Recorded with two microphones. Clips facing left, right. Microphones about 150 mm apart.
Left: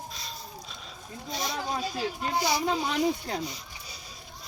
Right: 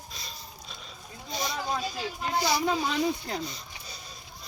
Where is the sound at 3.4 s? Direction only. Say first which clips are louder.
Left 1 dB; 10° left (ahead or behind).